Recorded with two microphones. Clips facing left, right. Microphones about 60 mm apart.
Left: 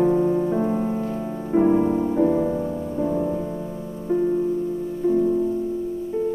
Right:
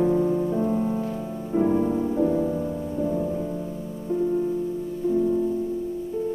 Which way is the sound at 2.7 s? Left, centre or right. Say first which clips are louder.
Left 2 dB; centre.